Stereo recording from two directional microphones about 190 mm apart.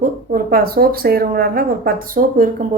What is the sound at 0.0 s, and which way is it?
Speech, 45° right (ahead or behind).